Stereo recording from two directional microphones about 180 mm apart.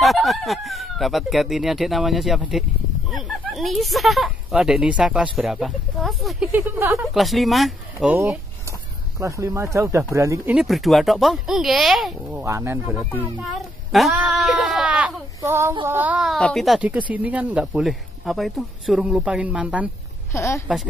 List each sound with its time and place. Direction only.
0.0 s speech: centre (ahead or behind)
7.2 s speech: centre (ahead or behind); by 10.5 s 15° right (ahead or behind)
10.5 s speech: centre (ahead or behind)
12.3 s speech: 15° right (ahead or behind)
13.4 s speech: centre (ahead or behind)
20.3 s speech: 15° left (ahead or behind)